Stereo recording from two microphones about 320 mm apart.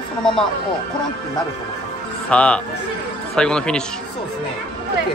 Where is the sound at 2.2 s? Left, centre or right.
Centre.